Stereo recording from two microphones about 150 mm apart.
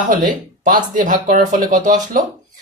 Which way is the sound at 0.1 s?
60° right (ahead or behind).